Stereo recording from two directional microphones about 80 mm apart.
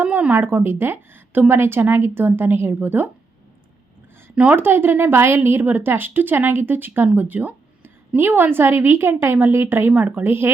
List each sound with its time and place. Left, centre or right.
0.0 s a woman's voice: right
4.4 s a woman's voice: right